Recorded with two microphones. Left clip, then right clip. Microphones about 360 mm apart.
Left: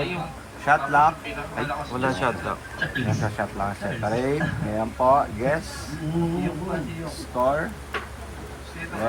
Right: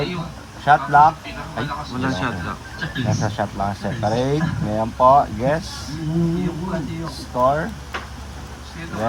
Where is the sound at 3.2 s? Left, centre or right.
Right.